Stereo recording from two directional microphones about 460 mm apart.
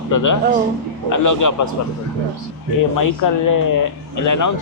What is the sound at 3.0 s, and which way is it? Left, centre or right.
Speech, left.